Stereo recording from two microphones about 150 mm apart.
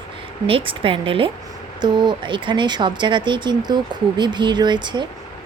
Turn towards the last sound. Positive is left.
turn(degrees=-30)  # may be behind; listen again after turning